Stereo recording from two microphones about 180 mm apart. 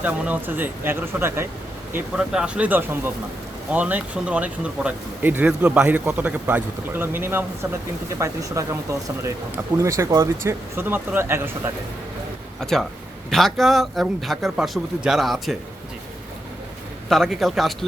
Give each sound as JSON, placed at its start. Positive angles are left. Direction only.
{"t": 0.0, "sound": "speech", "side_deg": -10}
{"t": 12.5, "sound": "speech", "side_deg": 0}
{"t": 17.1, "sound": "speech", "side_deg": 0}